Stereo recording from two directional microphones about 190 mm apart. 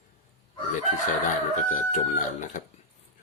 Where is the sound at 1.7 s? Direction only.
40° left (ahead or behind).